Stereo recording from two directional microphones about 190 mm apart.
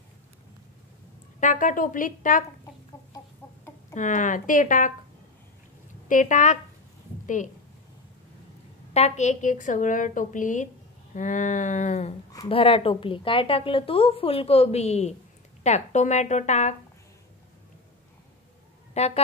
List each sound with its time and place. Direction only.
1.4 s speech: 45° left (ahead or behind)
3.9 s speech: 40° left (ahead or behind)
6.0 s a woman's voice: 45° left (ahead or behind)
8.9 s a woman's voice: 35° left (ahead or behind)
18.9 s a woman's voice: 35° left (ahead or behind)